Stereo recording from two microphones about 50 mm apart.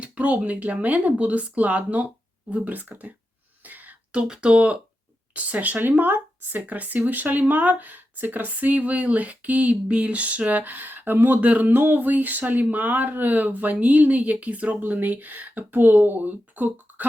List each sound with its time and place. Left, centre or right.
0.0 s speech: right
3.6 s a sound: right
4.1 s speech: centre; by 11.3 s right
11.3 s speech: right